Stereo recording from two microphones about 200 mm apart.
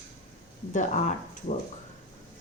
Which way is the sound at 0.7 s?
40° left (ahead or behind).